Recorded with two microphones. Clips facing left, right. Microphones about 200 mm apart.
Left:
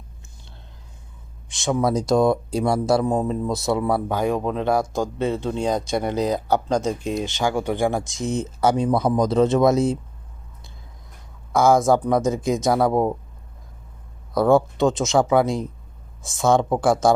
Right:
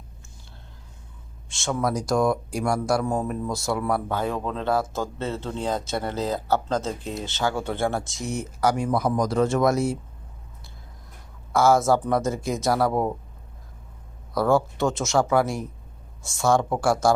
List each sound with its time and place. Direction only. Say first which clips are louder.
1.5 s speech: left 4 dB; 15° left (ahead or behind)
11.5 s speech: left 2 dB; 15° left (ahead or behind)
14.3 s speech: left 4 dB; 20° left (ahead or behind)